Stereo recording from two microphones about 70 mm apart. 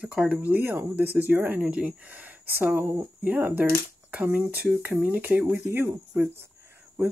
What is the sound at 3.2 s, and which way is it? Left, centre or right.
Speech, right.